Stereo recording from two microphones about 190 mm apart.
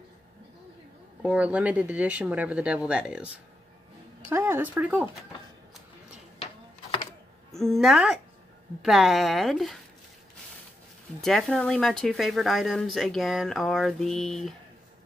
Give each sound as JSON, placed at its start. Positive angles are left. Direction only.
{"t": 1.2, "sound": "speech", "side_deg": -5}
{"t": 4.3, "sound": "speech", "side_deg": -10}
{"t": 6.4, "sound": "a sound", "side_deg": 25}
{"t": 7.5, "sound": "speech", "side_deg": 0}
{"t": 11.1, "sound": "speech", "side_deg": 5}